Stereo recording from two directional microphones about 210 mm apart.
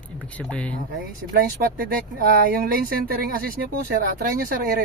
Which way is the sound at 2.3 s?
45° right (ahead or behind).